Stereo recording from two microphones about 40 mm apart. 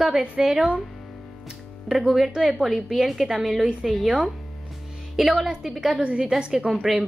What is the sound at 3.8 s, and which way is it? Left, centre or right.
Speech, centre.